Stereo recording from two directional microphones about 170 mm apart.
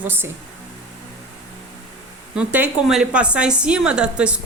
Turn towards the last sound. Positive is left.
turn(degrees=-5)  # may be behind; listen again after turning